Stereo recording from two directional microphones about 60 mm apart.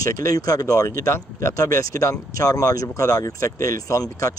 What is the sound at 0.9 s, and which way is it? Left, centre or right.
Speech, left.